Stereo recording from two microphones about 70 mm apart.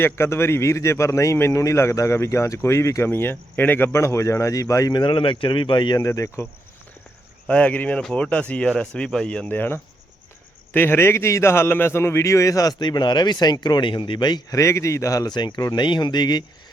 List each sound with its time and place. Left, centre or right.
0.0 s a man's voice: left
3.1 s a man's voice: left
6.0 s a man's voice: left
7.4 s speech: centre
9.5 s a man's voice: left
12.8 s speech: left
14.5 s a man's voice: left
15.3 s speech: left